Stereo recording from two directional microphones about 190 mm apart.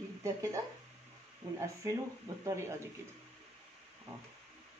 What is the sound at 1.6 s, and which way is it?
Speech, 15° right (ahead or behind).